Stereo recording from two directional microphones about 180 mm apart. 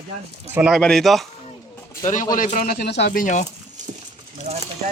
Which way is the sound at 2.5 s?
60° left (ahead or behind).